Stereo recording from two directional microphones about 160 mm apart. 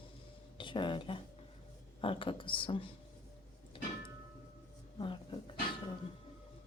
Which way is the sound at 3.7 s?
30° left (ahead or behind).